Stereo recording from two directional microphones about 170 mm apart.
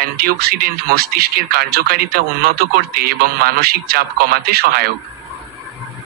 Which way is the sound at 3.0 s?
65° right (ahead or behind).